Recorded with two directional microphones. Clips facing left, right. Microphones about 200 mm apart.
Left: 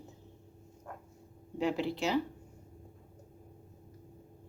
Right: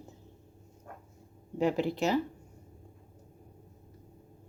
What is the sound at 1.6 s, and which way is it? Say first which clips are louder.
Speech: right 4 dB; 45° right (ahead or behind).